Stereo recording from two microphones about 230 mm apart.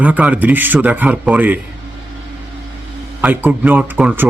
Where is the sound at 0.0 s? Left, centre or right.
Centre.